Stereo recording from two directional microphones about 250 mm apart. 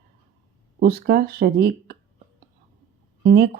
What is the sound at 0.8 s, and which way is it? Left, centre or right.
A woman's voice, right.